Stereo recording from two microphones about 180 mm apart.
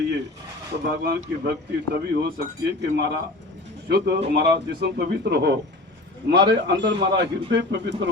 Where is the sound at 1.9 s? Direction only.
65° right (ahead or behind).